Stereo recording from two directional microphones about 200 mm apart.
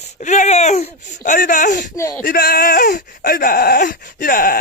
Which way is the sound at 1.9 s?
15° left (ahead or behind).